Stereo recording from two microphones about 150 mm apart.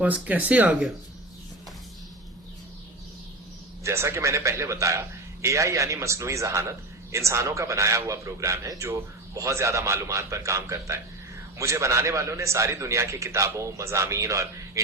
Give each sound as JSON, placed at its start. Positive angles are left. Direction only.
{"t": 0.0, "sound": "speech", "side_deg": -10}
{"t": 3.8, "sound": "a man's voice", "side_deg": -20}